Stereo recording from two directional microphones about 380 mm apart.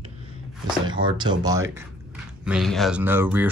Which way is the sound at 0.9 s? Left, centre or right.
Centre.